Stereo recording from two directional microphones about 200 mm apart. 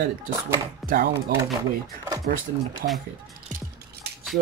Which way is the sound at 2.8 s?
50° right (ahead or behind).